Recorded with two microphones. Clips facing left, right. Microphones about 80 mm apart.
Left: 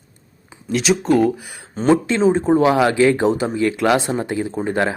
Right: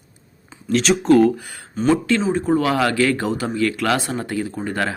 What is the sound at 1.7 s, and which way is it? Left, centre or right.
Speech, left.